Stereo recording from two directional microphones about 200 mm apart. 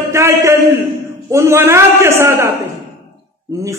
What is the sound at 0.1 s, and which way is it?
A man's voice, 15° right (ahead or behind).